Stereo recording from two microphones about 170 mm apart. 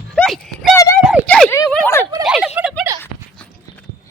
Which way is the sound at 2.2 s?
5° right (ahead or behind).